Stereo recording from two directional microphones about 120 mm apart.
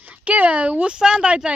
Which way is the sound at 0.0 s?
15° right (ahead or behind).